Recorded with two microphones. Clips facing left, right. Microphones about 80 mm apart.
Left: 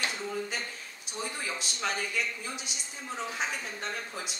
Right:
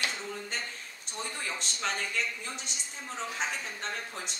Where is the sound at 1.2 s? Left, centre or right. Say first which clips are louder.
Left 1 dB; centre.